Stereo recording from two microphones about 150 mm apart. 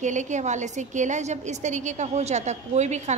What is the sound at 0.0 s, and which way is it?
A woman's voice, 55° right (ahead or behind).